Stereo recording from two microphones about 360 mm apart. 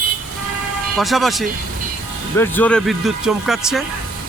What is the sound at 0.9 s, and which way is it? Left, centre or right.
Speech, centre.